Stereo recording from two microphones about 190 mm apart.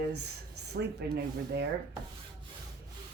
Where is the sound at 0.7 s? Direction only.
60° right (ahead or behind).